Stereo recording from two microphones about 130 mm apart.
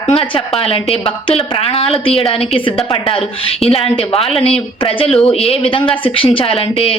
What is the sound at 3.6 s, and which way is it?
A woman's voice, 50° left (ahead or behind).